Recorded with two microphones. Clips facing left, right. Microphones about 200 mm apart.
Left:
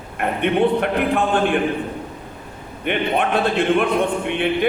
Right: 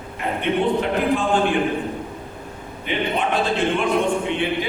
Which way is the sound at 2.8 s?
60° left (ahead or behind).